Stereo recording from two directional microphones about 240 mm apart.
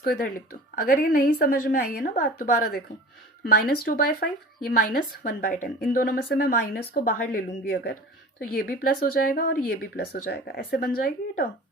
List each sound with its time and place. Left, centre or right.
0.0 s speech: left
3.8 s speech: left